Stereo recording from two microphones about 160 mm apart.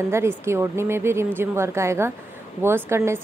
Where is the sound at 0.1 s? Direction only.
15° right (ahead or behind).